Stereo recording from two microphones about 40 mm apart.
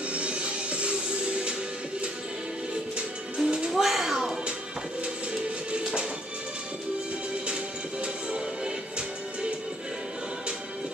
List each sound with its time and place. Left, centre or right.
0.1 s music: right
3.3 s music: centre
3.7 s a sound: centre
5.0 s music: right